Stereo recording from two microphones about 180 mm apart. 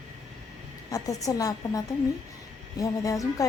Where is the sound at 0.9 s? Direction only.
20° left (ahead or behind).